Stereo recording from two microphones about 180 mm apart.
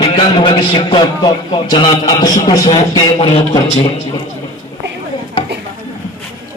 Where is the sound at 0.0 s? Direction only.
30° left (ahead or behind).